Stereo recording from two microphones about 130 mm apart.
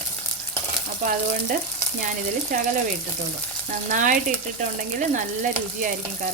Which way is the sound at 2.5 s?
75° right (ahead or behind).